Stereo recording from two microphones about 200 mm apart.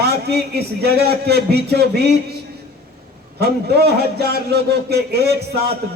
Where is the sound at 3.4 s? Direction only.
55° right (ahead or behind).